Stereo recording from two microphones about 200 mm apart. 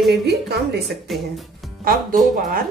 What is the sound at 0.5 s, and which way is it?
Speech, 55° right (ahead or behind).